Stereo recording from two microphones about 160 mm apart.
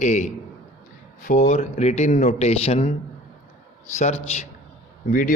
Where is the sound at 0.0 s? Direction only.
50° left (ahead or behind).